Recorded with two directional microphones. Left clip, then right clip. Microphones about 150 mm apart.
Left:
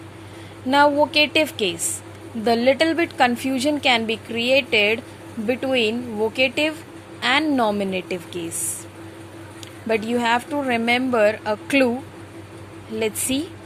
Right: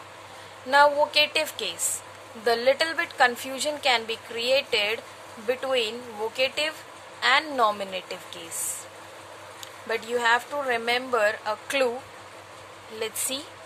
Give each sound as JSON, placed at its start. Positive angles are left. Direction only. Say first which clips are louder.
{"t": 0.7, "sound": "a woman's voice", "louder": "left 3 dB", "side_deg": 15}
{"t": 9.9, "sound": "a woman's voice", "louder": "left 3 dB", "side_deg": 20}
{"t": 13.0, "sound": "a woman's voice", "louder": "left 7 dB", "side_deg": 20}